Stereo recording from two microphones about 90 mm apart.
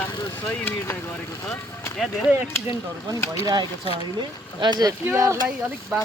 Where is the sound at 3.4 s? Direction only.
55° right (ahead or behind).